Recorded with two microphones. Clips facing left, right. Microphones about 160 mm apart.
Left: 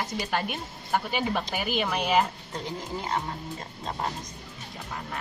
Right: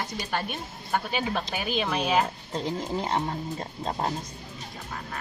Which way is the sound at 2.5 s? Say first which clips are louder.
Right 6 dB; 25° right (ahead or behind).